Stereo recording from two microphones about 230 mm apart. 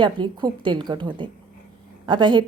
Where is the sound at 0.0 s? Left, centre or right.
Centre.